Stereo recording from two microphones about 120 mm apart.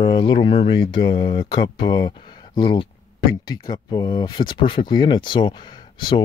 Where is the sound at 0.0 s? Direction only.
45° left (ahead or behind).